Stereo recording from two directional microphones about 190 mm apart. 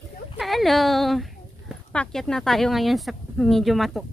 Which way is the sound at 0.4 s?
Centre (ahead or behind).